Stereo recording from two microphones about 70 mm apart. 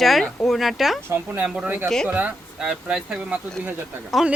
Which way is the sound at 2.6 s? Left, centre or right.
Centre.